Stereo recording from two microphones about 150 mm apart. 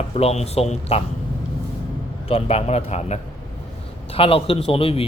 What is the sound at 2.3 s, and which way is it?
A man's voice, 40° left (ahead or behind).